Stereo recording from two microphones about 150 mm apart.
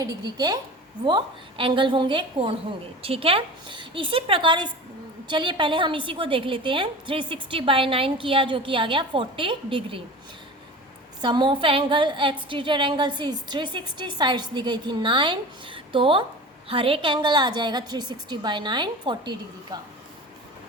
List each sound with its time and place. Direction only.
0.0 s a woman's voice: 25° right (ahead or behind)
11.2 s a woman's voice: 30° right (ahead or behind)